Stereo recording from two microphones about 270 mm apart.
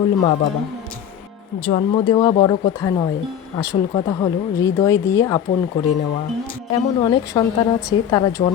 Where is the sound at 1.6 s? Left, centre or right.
Centre.